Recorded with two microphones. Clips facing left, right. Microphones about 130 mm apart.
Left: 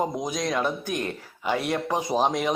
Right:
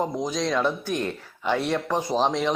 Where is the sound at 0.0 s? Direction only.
15° left (ahead or behind).